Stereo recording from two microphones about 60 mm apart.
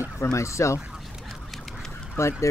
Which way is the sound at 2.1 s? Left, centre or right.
Left.